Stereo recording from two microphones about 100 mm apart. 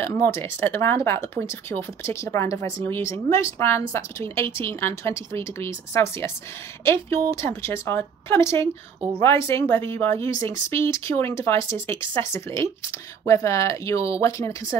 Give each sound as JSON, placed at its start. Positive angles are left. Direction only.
{"t": 0.0, "sound": "speech", "side_deg": 25}